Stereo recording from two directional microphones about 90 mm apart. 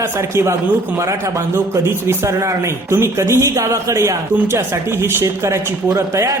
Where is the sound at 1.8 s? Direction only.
30° right (ahead or behind).